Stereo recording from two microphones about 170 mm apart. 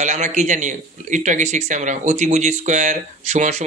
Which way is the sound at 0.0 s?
45° right (ahead or behind).